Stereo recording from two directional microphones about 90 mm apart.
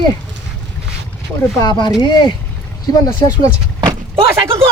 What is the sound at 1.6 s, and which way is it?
Speech, 55° left (ahead or behind).